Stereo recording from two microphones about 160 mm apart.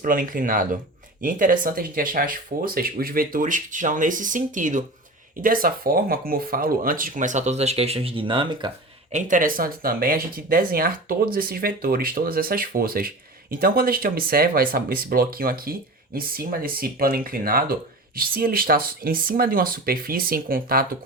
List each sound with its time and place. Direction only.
0.0 s speech: 60° right (ahead or behind); by 8.7 s 30° right (ahead or behind)
9.1 s speech: 55° right (ahead or behind)